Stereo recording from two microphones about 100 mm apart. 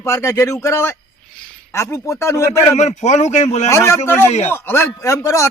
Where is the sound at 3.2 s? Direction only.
90° left.